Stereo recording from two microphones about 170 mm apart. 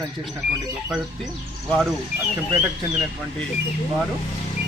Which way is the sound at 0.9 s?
Centre (ahead or behind).